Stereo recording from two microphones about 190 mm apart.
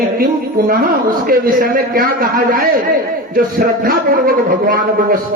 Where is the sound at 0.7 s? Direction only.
50° right (ahead or behind).